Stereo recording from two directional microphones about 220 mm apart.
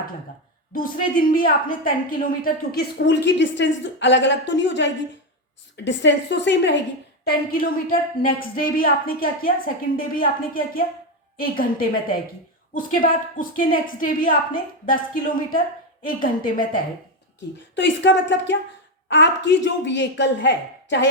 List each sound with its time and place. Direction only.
0.7 s a woman's voice: 40° left (ahead or behind)
7.3 s a woman's voice: 40° left (ahead or behind)
17.7 s a woman's voice: 55° left (ahead or behind)